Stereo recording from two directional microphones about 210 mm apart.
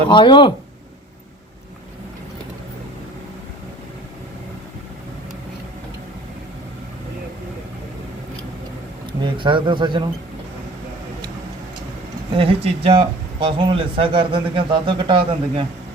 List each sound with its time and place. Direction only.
0.1 s speech: 25° left (ahead or behind)
9.2 s speech: 25° right (ahead or behind)
12.4 s speech: 25° right (ahead or behind)